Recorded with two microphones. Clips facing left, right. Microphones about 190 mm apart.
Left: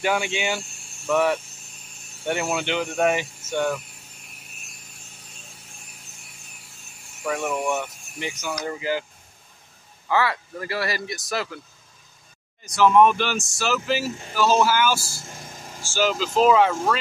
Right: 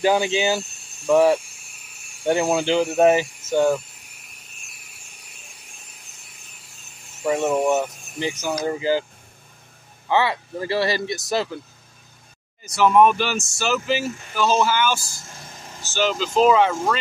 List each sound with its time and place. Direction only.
0.0 s speech: 35° right (ahead or behind)
0.5 s speech: 20° right (ahead or behind)
1.0 s speech: 30° right (ahead or behind)
1.4 s vehicle: 10° right (ahead or behind)
2.5 s speech: 35° right (ahead or behind)
7.2 s speech: 25° right (ahead or behind)
10.0 s speech: 25° right (ahead or behind)
12.6 s speech: centre (ahead or behind)